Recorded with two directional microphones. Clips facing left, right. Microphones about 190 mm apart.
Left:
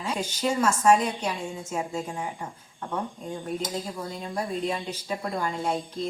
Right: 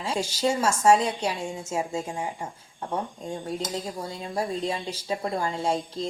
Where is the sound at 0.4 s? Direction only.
30° right (ahead or behind).